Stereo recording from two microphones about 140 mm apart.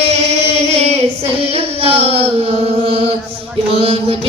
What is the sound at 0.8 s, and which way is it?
Female singing, 45° right (ahead or behind).